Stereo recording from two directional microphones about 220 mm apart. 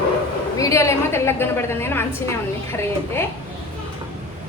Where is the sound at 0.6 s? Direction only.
15° left (ahead or behind).